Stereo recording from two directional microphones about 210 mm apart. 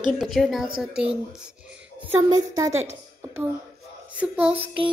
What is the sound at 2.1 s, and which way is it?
A woman's voice, 15° right (ahead or behind).